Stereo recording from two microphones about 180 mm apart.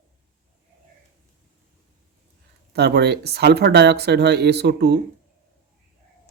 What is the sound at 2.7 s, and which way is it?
Speech, 65° right (ahead or behind).